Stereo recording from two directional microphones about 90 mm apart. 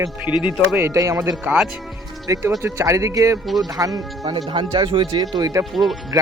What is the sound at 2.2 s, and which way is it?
Speech, 40° right (ahead or behind).